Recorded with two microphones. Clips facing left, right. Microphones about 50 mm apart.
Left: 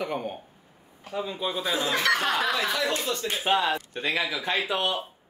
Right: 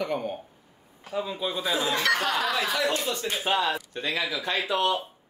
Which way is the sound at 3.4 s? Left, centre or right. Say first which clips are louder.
Left 2 dB; left.